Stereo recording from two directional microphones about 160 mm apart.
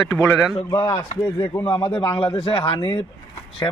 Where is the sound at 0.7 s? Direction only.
25° left (ahead or behind).